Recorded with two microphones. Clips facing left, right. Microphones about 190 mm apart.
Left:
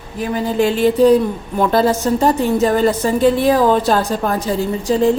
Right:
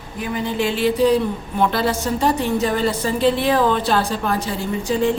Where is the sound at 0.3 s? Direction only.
40° left (ahead or behind).